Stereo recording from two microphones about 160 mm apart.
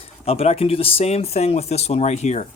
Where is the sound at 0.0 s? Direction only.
40° left (ahead or behind).